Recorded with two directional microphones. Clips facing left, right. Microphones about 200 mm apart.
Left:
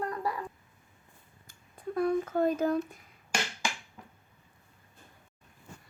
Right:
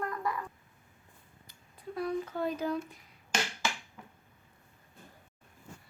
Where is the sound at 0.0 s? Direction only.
35° left (ahead or behind).